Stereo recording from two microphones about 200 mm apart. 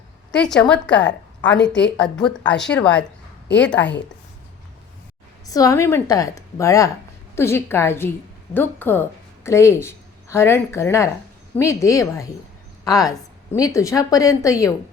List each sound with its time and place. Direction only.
0.3 s a woman's voice: 5° left (ahead or behind)
5.5 s a woman's voice: 15° left (ahead or behind)